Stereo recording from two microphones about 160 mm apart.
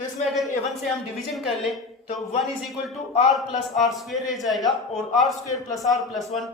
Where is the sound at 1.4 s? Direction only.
Centre (ahead or behind).